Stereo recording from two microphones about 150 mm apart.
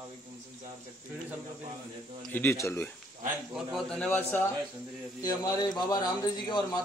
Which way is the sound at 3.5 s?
Centre (ahead or behind).